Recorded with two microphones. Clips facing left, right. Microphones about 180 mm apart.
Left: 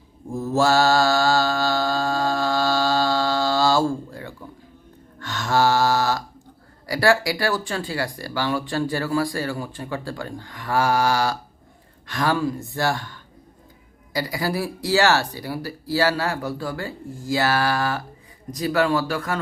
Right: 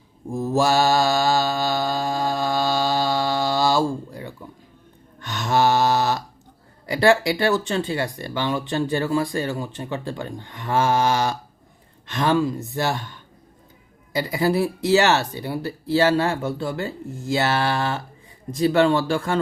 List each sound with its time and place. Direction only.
0.3 s mantra: 15° right (ahead or behind)
6.8 s speech: 20° right (ahead or behind)